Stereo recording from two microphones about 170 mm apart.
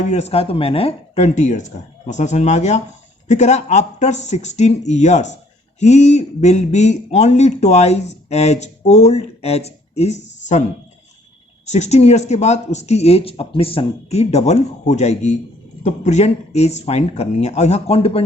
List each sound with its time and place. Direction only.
0.1 s speech: 40° left (ahead or behind)
11.6 s speech: 40° left (ahead or behind)